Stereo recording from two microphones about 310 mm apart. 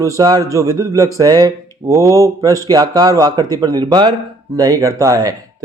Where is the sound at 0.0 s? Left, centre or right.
Centre.